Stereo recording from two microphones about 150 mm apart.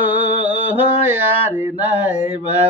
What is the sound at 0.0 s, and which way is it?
Mantra, 10° right (ahead or behind).